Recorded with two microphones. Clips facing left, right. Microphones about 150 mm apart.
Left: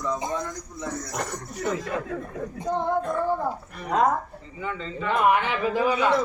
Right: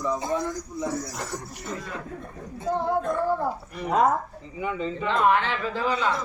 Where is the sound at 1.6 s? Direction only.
90° left.